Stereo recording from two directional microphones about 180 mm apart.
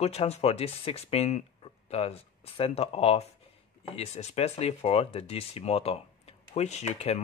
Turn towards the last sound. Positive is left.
turn(degrees=35)  # may be behind; listen again after turning